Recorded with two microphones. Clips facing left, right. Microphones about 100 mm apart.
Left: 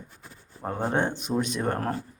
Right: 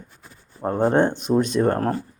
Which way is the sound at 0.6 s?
30° right (ahead or behind).